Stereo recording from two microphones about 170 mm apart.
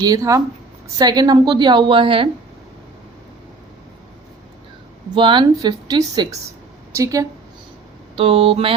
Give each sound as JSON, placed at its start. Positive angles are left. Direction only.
{"t": 0.0, "sound": "a woman's voice", "side_deg": -20}
{"t": 5.1, "sound": "a woman's voice", "side_deg": -25}
{"t": 8.1, "sound": "speech", "side_deg": -35}